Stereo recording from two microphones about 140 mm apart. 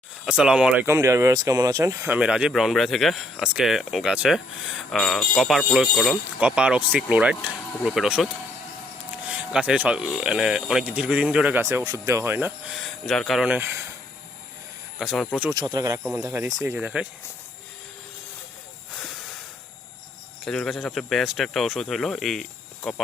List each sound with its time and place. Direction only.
0.3 s speech: 10° right (ahead or behind)
0.9 s speech: 20° right (ahead or behind)
2.1 s speech: 5° right (ahead or behind)
11.6 s speech: 20° right (ahead or behind)
12.7 s speech: centre (ahead or behind)
13.6 s speech: 20° right (ahead or behind)
14.9 s speech: 5° right (ahead or behind)
15.5 s speech: 30° right (ahead or behind)
16.0 s speech: 10° right (ahead or behind)
16.5 s speech: 25° right (ahead or behind)
16.7 s speech: 10° right (ahead or behind)
19.0 s a sound: centre (ahead or behind)
20.4 s speech: centre (ahead or behind)